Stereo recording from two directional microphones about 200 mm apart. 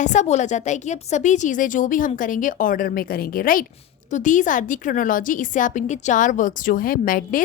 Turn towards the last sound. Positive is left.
turn(degrees=45)  # may be behind; listen again after turning